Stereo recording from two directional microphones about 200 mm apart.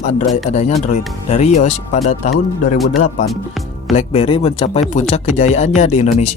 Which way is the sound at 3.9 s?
30° left (ahead or behind).